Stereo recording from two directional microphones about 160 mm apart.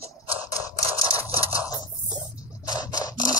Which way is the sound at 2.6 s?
25° left (ahead or behind).